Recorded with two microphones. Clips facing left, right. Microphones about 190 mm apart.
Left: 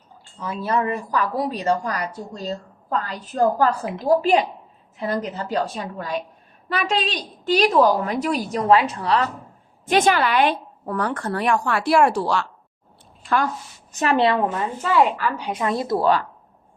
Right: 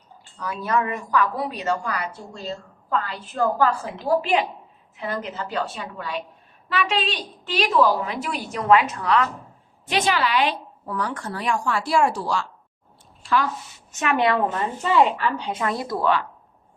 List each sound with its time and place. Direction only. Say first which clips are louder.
0.3 s a woman's voice: left 1 dB; 25° left (ahead or behind)
9.8 s a woman's voice: left 4 dB; 50° left (ahead or behind); by 12.5 s 65° left (ahead or behind)
13.9 s a woman's voice: left 2 dB; 35° left (ahead or behind)
14.5 s a woman's voice: even; 5° left (ahead or behind); by 16.0 s 25° left (ahead or behind)